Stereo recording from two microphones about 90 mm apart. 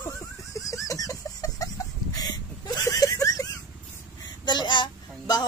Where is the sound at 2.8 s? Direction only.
40° left (ahead or behind).